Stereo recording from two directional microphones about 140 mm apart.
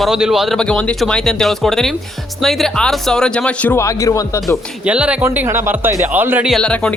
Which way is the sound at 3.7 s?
20° left (ahead or behind).